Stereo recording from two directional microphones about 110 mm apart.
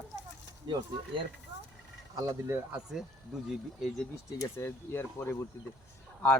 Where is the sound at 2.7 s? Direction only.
5° right (ahead or behind).